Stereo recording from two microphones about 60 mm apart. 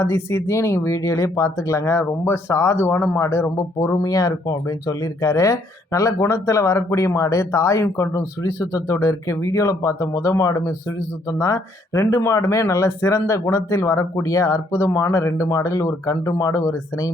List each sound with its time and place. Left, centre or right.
0.0 s speech: left
4.0 s speech: left